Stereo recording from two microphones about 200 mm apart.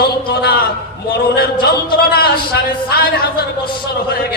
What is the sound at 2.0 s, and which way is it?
A man's voice, 50° left (ahead or behind).